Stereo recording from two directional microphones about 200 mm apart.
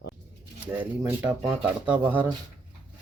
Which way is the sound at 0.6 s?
5° right (ahead or behind).